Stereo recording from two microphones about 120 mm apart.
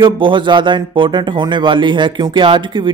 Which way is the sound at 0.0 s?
45° right (ahead or behind).